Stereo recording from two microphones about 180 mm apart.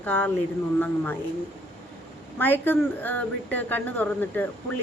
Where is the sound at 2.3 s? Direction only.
10° left (ahead or behind).